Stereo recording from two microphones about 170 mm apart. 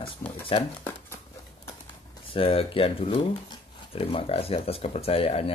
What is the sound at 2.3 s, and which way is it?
Speech, 35° left (ahead or behind).